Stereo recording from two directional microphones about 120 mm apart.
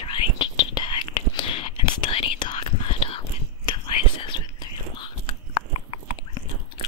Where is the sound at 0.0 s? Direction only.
45° left (ahead or behind).